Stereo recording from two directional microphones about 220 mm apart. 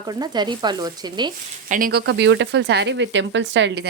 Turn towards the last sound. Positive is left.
turn(degrees=-55)  # may be behind; listen again after turning